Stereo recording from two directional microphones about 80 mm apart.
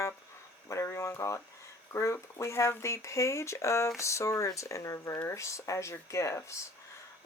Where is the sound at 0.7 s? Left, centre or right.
Left.